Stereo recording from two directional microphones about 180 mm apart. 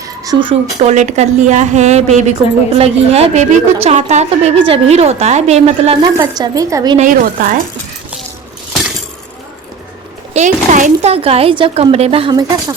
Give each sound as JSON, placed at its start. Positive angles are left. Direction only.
{"t": 0.0, "sound": "speech", "side_deg": -25}
{"t": 6.0, "sound": "a woman's voice", "side_deg": -20}
{"t": 6.9, "sound": "a woman's voice", "side_deg": -45}
{"t": 10.3, "sound": "speech", "side_deg": -45}